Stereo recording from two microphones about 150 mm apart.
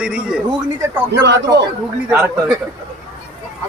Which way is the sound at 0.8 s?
20° right (ahead or behind).